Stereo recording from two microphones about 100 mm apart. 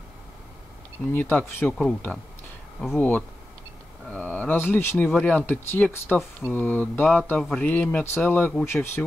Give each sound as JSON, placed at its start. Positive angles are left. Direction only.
{"t": 1.0, "sound": "speech", "side_deg": 15}